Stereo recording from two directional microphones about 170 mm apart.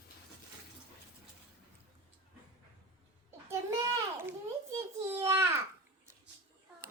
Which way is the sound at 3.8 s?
20° right (ahead or behind).